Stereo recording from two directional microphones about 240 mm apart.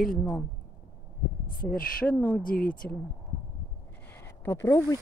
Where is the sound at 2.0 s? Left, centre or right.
Centre.